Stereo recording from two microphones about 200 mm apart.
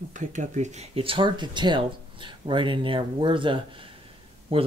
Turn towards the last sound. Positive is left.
turn(degrees=-25)  # may be behind; listen again after turning